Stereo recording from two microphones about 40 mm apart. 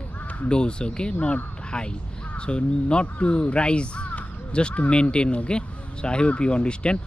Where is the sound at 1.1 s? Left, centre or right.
Left.